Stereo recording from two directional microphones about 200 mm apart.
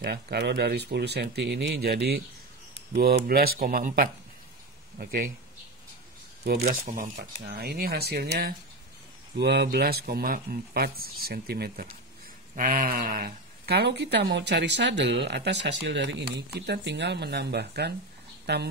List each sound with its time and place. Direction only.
0.0 s a woman's voice: 55° right (ahead or behind)
6.6 s a woman's voice: 40° right (ahead or behind); by 18.6 s 60° right (ahead or behind)